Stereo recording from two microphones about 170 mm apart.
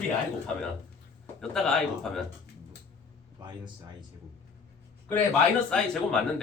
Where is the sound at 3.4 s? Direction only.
25° right (ahead or behind).